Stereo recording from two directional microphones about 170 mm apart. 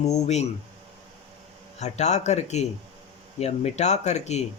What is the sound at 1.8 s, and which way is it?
Speech, 40° left (ahead or behind).